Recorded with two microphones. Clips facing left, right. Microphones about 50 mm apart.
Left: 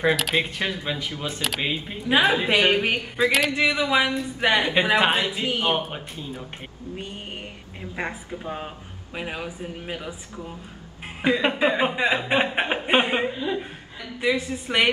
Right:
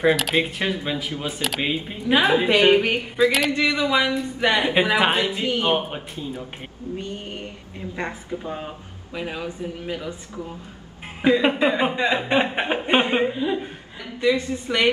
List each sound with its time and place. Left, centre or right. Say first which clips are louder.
0.0 s speech: right 2 dB; centre
3.6 s speech: right 1 dB; left
4.4 s speech: right 1 dB; centre
7.0 s speech: right 1 dB; centre
11.2 s speech: right 3 dB; centre
14.2 s speech: right 3 dB; centre